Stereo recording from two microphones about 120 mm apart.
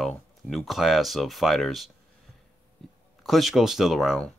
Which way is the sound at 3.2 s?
Centre (ahead or behind).